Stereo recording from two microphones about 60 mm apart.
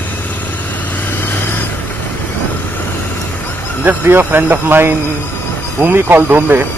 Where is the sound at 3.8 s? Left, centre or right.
Right.